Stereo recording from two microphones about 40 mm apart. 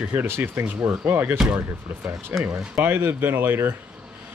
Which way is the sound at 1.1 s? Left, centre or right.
Right.